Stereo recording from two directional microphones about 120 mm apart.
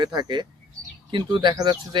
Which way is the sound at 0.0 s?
35° right (ahead or behind).